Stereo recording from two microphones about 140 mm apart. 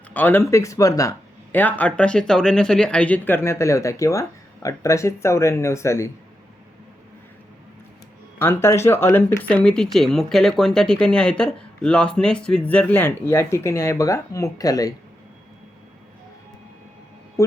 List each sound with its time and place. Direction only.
0.1 s speech: 15° left (ahead or behind)
1.5 s speech: 10° left (ahead or behind)
8.4 s speech: 20° left (ahead or behind)